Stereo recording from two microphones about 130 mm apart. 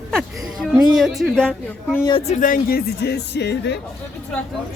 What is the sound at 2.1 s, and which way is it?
Speech, 45° left (ahead or behind).